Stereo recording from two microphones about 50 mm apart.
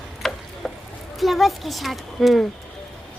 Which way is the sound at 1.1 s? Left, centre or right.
Centre.